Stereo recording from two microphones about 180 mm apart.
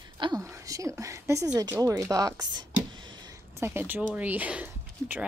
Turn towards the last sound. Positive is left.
turn(degrees=-10)  # may be behind; listen again after turning